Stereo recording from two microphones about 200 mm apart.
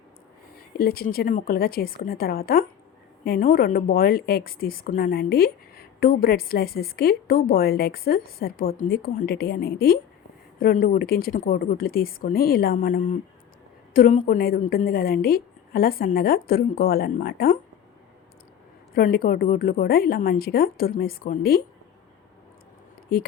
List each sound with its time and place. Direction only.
0.8 s a woman's voice: 50° left (ahead or behind)
18.9 s a woman's voice: 50° left (ahead or behind)
23.1 s a woman's voice: 50° left (ahead or behind)